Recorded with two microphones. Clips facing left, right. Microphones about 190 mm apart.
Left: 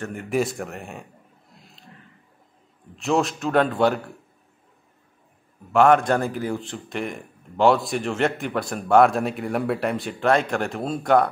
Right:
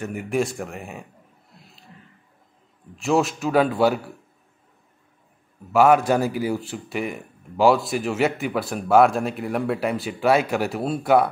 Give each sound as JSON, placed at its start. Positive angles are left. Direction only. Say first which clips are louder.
{"t": 0.0, "sound": "speech", "louder": "even", "side_deg": -5}
{"t": 3.0, "sound": "speech", "louder": "right 1 dB", "side_deg": 0}
{"t": 5.7, "sound": "speech", "louder": "even", "side_deg": -5}